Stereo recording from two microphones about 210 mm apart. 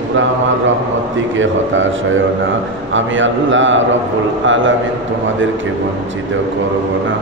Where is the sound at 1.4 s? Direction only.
65° right (ahead or behind).